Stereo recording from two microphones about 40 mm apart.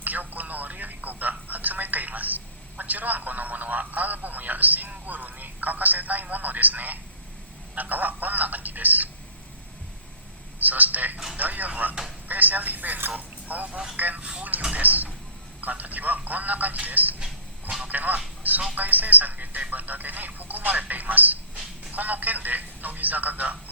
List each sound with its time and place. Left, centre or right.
0.0 s speech: right
10.6 s speech: right
17.8 s a sound: right
18.7 s speech: right